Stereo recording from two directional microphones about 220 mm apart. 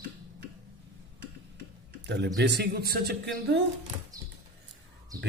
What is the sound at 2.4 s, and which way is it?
Speech, 50° right (ahead or behind).